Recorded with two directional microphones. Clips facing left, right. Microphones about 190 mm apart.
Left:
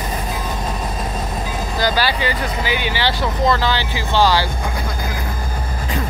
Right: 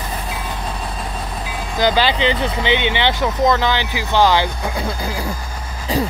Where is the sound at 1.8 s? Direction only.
20° right (ahead or behind).